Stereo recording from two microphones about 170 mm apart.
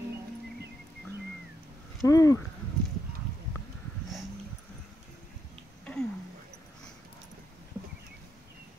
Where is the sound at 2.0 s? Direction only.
20° left (ahead or behind).